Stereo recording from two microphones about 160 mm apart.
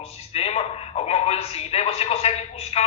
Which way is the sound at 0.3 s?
40° left (ahead or behind).